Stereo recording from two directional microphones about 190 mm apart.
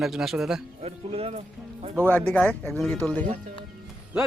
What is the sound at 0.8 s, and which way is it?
A man's voice, 30° right (ahead or behind).